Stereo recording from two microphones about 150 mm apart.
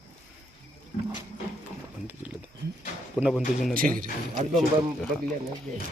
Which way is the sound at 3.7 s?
70° right (ahead or behind).